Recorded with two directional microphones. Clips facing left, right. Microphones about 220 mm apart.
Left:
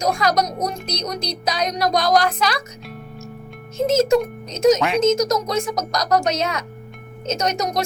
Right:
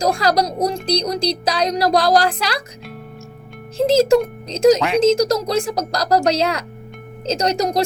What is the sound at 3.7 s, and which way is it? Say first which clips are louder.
Speech: right 3 dB; 30° right (ahead or behind).